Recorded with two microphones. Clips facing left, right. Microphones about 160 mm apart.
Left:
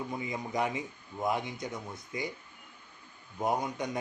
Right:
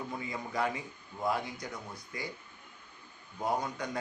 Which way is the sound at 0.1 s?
20° left (ahead or behind).